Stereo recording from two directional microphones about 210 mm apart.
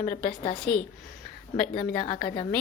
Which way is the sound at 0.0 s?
35° left (ahead or behind).